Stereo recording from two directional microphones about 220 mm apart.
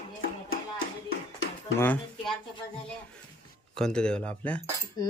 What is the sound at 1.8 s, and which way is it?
Speech, 5° left (ahead or behind).